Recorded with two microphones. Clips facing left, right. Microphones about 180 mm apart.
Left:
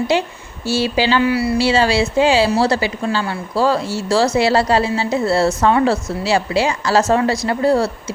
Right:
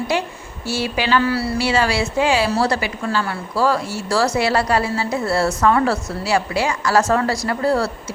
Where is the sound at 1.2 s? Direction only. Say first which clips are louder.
Left 4 dB; 15° left (ahead or behind).